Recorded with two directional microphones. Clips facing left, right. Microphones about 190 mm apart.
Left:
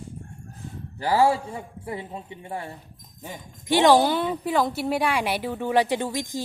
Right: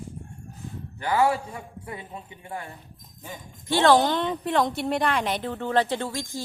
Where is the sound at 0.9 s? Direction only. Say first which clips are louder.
Left 2 dB; 30° left (ahead or behind).